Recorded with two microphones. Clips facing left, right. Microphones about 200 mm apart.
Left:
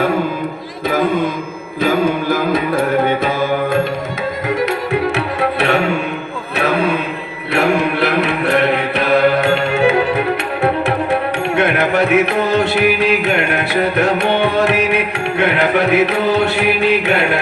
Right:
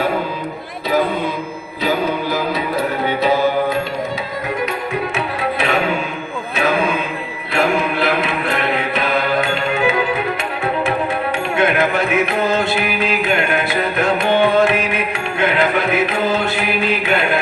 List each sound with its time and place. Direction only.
1.8 s music: 50° left (ahead or behind)
4.4 s music: 75° left (ahead or behind)
7.5 s mantra: 65° left (ahead or behind)